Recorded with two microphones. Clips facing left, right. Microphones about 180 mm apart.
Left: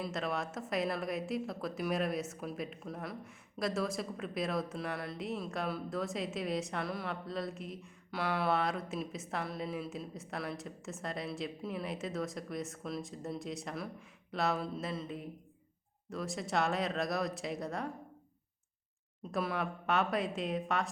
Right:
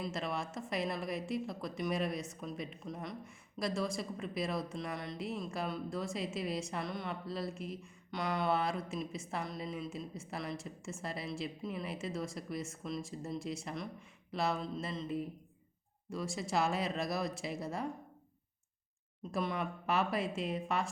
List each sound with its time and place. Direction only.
0.0 s a woman's voice: centre (ahead or behind)
19.3 s a woman's voice: 5° left (ahead or behind)